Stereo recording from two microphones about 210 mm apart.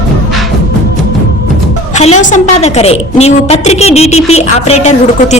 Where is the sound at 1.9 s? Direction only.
35° left (ahead or behind).